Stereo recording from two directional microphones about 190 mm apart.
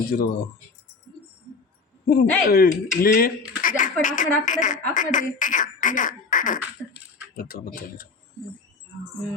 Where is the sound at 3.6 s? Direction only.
45° left (ahead or behind).